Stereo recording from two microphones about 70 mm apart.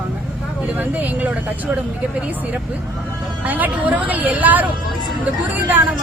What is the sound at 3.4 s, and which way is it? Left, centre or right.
Speech, right.